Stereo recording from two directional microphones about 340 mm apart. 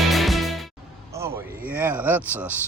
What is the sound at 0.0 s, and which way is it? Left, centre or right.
Music, centre.